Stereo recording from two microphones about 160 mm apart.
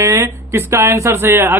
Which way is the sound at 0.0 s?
20° right (ahead or behind).